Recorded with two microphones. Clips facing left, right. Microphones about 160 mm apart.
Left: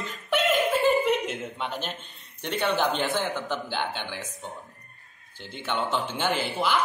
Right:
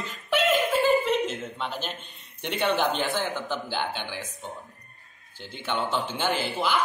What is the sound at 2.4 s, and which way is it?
Speech, 15° right (ahead or behind).